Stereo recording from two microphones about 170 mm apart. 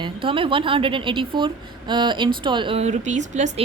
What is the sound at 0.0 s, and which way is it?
A woman's voice, 30° right (ahead or behind).